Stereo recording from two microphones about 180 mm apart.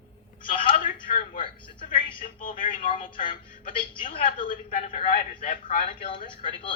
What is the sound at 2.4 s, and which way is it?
Speech, 50° left (ahead or behind).